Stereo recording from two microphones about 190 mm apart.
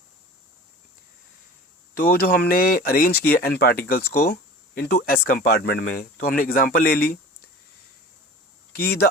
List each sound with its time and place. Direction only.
2.0 s speech: 50° left (ahead or behind)
8.7 s speech: 55° left (ahead or behind)